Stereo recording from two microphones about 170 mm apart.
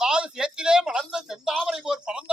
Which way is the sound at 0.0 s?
5° right (ahead or behind).